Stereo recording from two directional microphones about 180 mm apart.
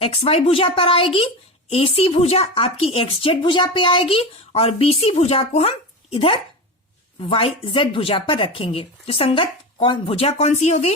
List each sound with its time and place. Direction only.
0.0 s speech: 35° left (ahead or behind)